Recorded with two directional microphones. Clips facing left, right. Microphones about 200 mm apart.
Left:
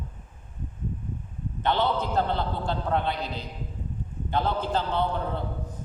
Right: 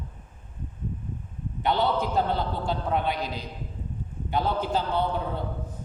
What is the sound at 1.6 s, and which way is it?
Mantra, 15° right (ahead or behind).